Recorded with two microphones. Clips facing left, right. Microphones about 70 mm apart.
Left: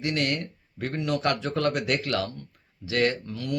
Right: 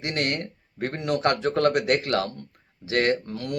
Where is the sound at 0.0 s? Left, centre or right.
Right.